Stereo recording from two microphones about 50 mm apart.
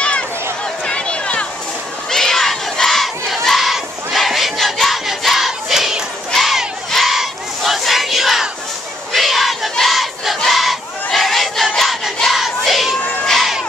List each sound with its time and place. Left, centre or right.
0.8 s a sound: left
2.0 s crowd: centre
6.3 s battle cry: centre
10.4 s crowd: centre